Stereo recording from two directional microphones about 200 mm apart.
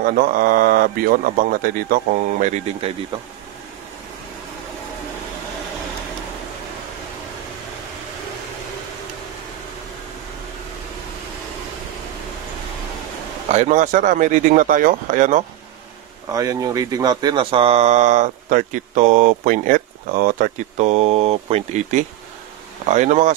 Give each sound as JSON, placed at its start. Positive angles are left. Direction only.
{"t": 0.2, "sound": "a man's voice", "side_deg": -45}
{"t": 13.5, "sound": "speech", "side_deg": -35}
{"t": 16.3, "sound": "speech", "side_deg": -20}